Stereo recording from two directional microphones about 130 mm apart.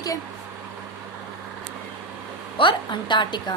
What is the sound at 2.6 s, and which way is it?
Speech, 40° left (ahead or behind).